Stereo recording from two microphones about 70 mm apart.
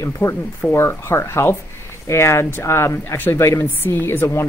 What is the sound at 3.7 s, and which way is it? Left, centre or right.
Speech, left.